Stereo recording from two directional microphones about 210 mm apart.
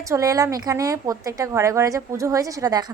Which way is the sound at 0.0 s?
15° right (ahead or behind).